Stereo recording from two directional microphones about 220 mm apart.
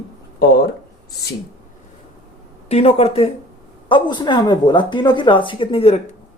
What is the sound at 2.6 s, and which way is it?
Speech, 30° left (ahead or behind).